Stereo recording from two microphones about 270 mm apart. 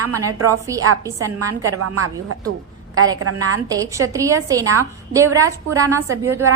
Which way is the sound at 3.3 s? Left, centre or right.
Centre.